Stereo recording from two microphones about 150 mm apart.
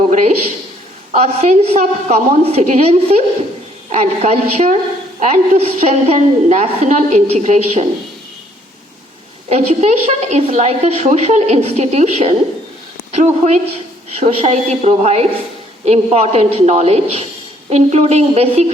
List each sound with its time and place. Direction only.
0.1 s a woman's voice: 55° right (ahead or behind)
1.2 s a woman's voice: 45° right (ahead or behind)
9.5 s a woman's voice: 45° right (ahead or behind)
13.4 s a woman's voice: 50° right (ahead or behind)